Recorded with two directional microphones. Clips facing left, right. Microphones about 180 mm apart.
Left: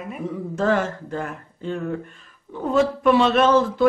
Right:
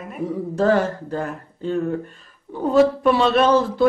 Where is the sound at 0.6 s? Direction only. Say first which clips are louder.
Right 3 dB; 35° right (ahead or behind).